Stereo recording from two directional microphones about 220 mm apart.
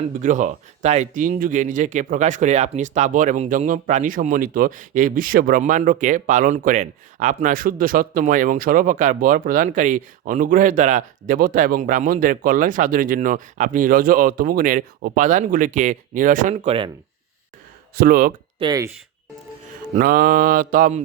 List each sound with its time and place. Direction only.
0.0 s speech: 35° right (ahead or behind)
17.9 s speech: 40° right (ahead or behind)
18.6 s speech: 15° right (ahead or behind)
20.0 s speech: 40° right (ahead or behind)